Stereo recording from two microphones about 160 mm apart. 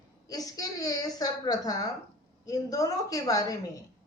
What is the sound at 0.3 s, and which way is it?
Speech, 20° left (ahead or behind).